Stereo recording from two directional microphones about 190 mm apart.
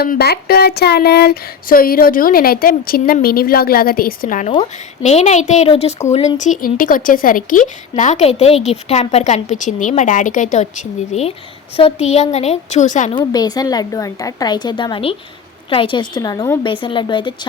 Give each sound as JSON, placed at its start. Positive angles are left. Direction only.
{"t": 0.0, "sound": "a sound", "side_deg": 55}
{"t": 5.0, "sound": "a woman's voice", "side_deg": 35}
{"t": 13.1, "sound": "a woman's voice", "side_deg": 20}